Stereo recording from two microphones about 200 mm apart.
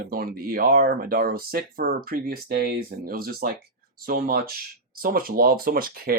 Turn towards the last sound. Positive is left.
turn(degrees=-45)  # may be behind; listen again after turning